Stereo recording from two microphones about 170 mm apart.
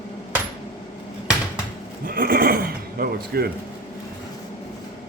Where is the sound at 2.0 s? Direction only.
60° right (ahead or behind).